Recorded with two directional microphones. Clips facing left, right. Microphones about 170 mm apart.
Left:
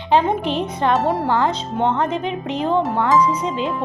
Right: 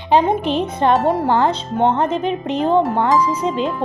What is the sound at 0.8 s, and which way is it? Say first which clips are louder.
Speech: right 3 dB; 25° right (ahead or behind).